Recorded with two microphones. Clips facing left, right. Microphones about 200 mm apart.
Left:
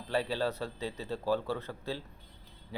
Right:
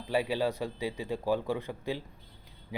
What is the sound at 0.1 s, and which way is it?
Speech, 10° right (ahead or behind).